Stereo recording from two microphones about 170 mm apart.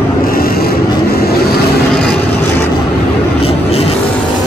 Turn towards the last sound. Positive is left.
turn(degrees=35)  # may be behind; listen again after turning